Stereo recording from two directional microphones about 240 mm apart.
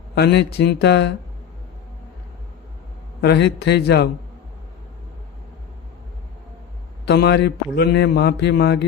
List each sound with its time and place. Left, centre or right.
0.1 s a man's voice: left
3.2 s a man's voice: left
7.0 s a man's voice: left